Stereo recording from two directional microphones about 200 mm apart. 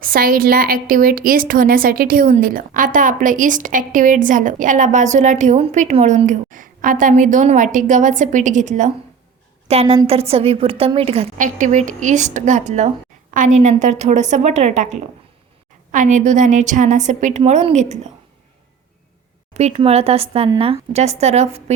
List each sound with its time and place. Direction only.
0.0 s a woman's voice: 45° right (ahead or behind)
19.5 s a woman's voice: 30° right (ahead or behind)